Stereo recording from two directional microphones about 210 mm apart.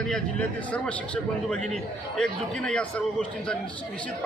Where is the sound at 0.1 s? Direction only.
5° left (ahead or behind).